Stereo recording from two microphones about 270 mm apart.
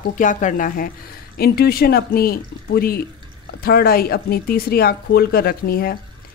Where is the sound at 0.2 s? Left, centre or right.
Left.